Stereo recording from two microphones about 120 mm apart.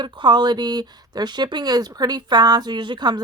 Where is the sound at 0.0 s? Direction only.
40° right (ahead or behind).